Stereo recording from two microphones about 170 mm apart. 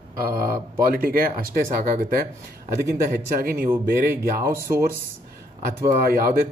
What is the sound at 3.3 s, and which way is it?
Speech, 55° right (ahead or behind).